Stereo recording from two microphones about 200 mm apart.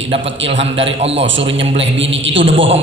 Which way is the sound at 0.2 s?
65° right (ahead or behind).